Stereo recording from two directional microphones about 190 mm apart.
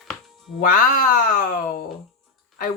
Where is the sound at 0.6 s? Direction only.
45° left (ahead or behind).